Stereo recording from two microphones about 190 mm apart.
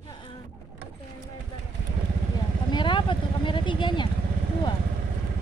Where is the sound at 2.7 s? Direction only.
25° left (ahead or behind).